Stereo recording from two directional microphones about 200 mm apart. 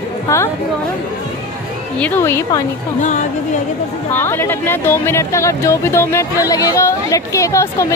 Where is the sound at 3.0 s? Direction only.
35° left (ahead or behind).